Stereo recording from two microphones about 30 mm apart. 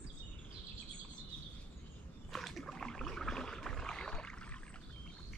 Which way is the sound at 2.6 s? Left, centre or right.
Centre.